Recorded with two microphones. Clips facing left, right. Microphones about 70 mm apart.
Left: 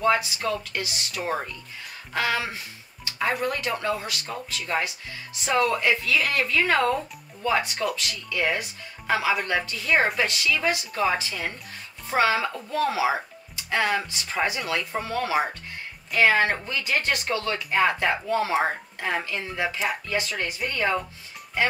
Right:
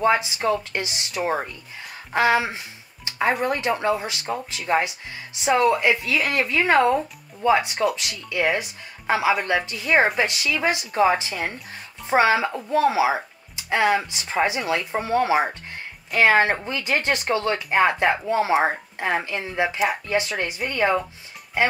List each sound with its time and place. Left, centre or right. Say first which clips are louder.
0.0 s speech: right 3 dB; right